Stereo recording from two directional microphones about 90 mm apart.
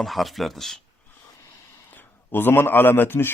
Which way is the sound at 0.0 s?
Centre (ahead or behind).